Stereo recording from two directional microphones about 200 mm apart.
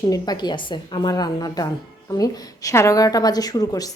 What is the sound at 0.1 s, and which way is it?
A woman's voice, 20° left (ahead or behind).